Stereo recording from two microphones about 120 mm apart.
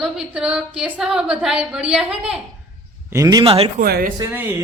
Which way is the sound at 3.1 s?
30° right (ahead or behind).